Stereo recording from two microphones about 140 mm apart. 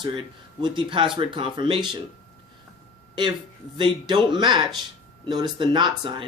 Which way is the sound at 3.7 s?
35° right (ahead or behind).